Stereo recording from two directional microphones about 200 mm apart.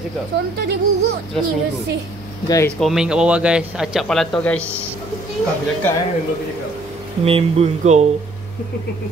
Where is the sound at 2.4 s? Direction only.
15° left (ahead or behind).